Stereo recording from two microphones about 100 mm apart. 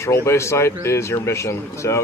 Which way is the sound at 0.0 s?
30° left (ahead or behind).